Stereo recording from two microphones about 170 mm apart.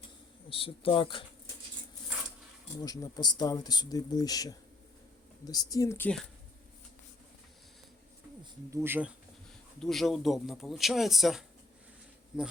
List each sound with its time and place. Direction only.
0.5 s speech: 35° left (ahead or behind)
2.8 s speech: 20° left (ahead or behind)
8.7 s speech: 15° right (ahead or behind)
9.8 s speech: centre (ahead or behind)